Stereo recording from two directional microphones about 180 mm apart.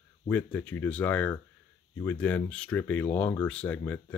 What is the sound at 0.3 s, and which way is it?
Speech, 10° left (ahead or behind).